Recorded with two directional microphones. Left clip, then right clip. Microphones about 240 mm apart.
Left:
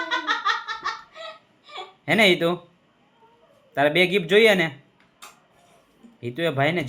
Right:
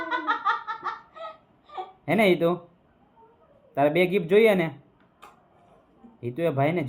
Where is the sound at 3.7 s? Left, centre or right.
Centre.